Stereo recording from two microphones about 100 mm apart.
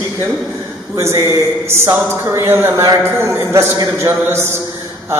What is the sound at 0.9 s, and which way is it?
A man's voice, 30° right (ahead or behind).